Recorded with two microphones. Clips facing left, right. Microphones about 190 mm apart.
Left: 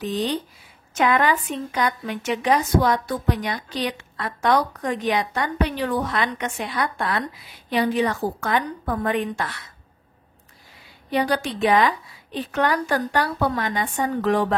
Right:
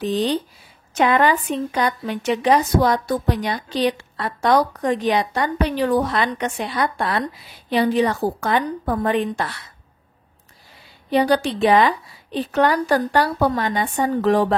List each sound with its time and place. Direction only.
0.0 s a woman's voice: 30° right (ahead or behind)
11.1 s a woman's voice: 30° right (ahead or behind)